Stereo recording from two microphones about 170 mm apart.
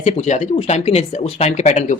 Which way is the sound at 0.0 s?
45° left (ahead or behind).